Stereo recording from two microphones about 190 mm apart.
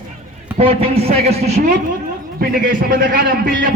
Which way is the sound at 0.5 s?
30° right (ahead or behind).